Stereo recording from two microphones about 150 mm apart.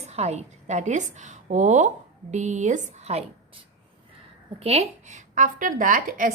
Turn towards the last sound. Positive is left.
turn(degrees=-60)  # may be behind; listen again after turning